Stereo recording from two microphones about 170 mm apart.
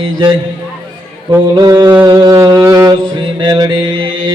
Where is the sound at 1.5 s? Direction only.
20° right (ahead or behind).